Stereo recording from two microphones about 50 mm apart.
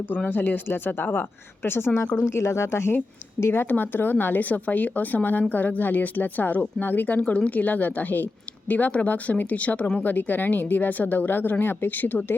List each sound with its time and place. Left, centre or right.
0.3 s a woman's voice: left
2.3 s a woman's voice: left